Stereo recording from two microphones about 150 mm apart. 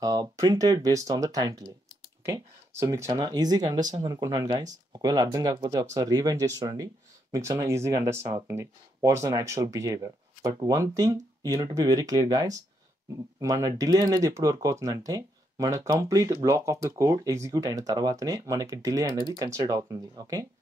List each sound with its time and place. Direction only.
0.0 s speech: 25° right (ahead or behind)